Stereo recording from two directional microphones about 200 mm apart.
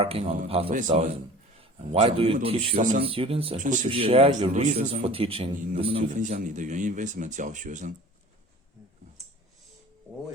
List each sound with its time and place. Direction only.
0.0 s a man's voice: 30° right (ahead or behind)
0.7 s a man's voice: 40° right (ahead or behind)
1.5 s a man's voice: 30° right (ahead or behind)
3.6 s a man's voice: 40° right (ahead or behind)
3.8 s a man's voice: 30° right (ahead or behind)